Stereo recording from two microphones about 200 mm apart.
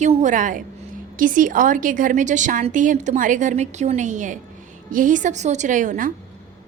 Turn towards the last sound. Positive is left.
turn(degrees=-40)  # may be behind; listen again after turning